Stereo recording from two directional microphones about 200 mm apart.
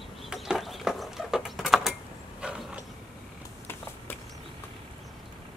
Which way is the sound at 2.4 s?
5° right (ahead or behind).